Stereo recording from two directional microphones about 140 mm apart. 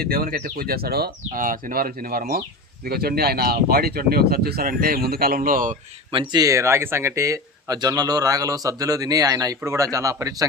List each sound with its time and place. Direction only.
0.0 s speech: 90° right
6.1 s speech: 40° right (ahead or behind)
6.4 s speech: 20° right (ahead or behind)